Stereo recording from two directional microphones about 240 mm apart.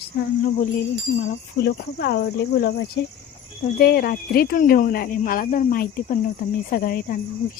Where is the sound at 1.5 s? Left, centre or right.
Left.